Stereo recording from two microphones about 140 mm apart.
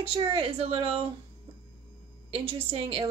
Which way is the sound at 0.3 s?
45° right (ahead or behind).